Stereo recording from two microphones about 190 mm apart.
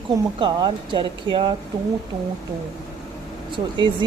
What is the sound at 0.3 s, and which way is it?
Speech, 25° right (ahead or behind).